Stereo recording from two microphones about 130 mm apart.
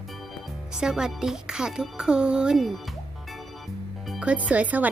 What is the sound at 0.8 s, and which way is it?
A child's voice, 5° right (ahead or behind).